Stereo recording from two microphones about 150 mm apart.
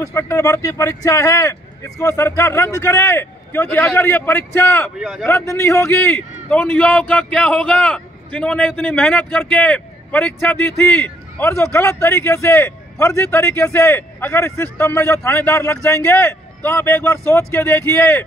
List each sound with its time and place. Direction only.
0.0 s a man's voice: 20° left (ahead or behind)
4.9 s speech: centre (ahead or behind)
5.3 s a man's voice: 20° left (ahead or behind)